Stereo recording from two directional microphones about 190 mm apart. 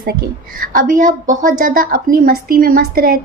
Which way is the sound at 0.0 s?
50° right (ahead or behind).